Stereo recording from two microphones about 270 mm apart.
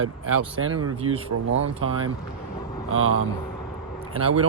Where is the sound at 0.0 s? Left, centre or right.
Right.